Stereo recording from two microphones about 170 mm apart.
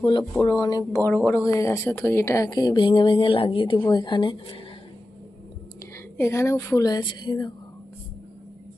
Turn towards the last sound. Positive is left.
turn(degrees=25)  # may be behind; listen again after turning